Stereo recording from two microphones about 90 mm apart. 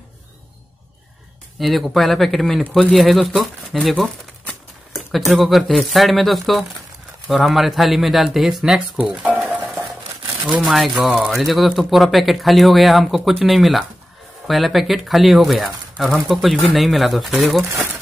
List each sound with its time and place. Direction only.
1.6 s speech: centre (ahead or behind)
9.1 s stir: 15° right (ahead or behind)
10.6 s speech: centre (ahead or behind)